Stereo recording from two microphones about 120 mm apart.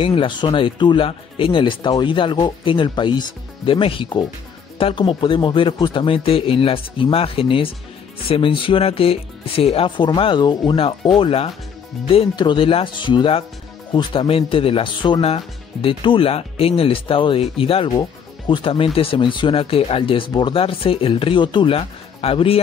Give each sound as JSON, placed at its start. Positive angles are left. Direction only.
{"t": 0.0, "sound": "speech", "side_deg": 45}
{"t": 11.1, "sound": "speech", "side_deg": 50}